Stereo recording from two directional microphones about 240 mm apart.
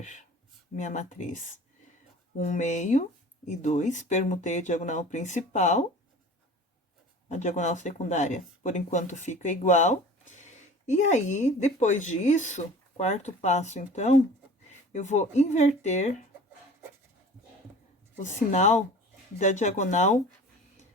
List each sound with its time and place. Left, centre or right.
0.0 s speech: left
2.4 s speech: left
7.3 s speech: left
18.2 s speech: left